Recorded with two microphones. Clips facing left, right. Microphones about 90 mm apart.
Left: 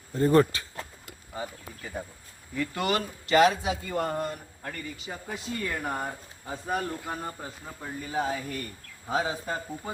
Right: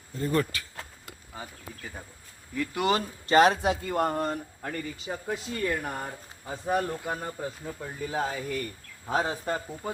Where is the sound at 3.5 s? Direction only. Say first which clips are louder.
Right 3 dB; 55° right (ahead or behind).